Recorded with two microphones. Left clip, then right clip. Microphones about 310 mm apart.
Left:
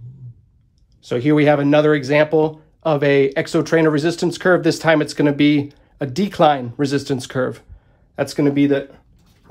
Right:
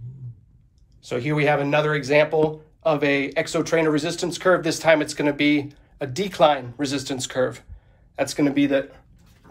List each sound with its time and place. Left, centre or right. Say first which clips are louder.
1.0 s speech: left 7 dB; left